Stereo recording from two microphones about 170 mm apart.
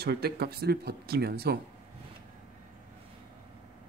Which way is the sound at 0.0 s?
65° right (ahead or behind).